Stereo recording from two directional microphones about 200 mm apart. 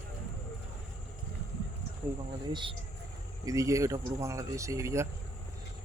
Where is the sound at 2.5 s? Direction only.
25° right (ahead or behind).